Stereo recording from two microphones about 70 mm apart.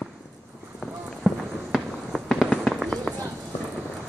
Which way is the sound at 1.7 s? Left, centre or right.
Centre.